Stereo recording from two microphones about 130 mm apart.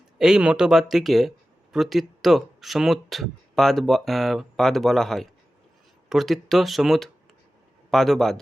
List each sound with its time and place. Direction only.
0.2 s speech: 5° right (ahead or behind)